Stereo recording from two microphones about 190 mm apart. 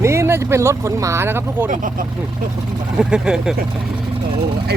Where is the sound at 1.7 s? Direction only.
45° right (ahead or behind).